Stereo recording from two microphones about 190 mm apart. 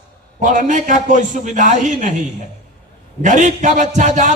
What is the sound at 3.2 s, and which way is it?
A man's voice, 40° right (ahead or behind).